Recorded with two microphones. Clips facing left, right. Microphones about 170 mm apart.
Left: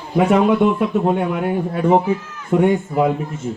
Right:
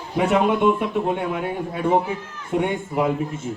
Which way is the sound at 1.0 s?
45° left (ahead or behind).